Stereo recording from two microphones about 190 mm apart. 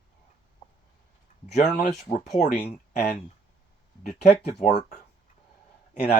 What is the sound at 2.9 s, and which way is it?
Speech, 50° left (ahead or behind).